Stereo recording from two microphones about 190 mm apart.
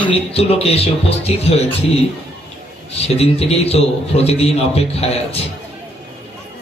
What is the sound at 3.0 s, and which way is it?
A man's voice, 30° left (ahead or behind).